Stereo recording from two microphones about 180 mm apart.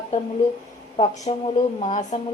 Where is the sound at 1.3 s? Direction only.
35° left (ahead or behind).